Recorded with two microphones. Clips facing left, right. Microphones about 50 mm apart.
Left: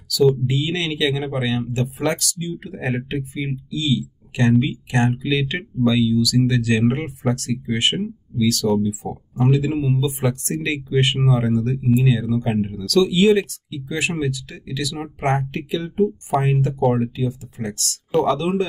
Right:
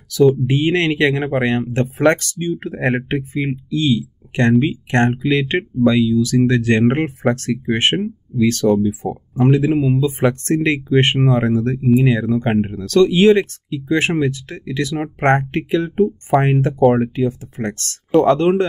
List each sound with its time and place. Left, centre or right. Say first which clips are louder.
0.5 s speech: right 7 dB; right
9.5 s speech: right 5 dB; right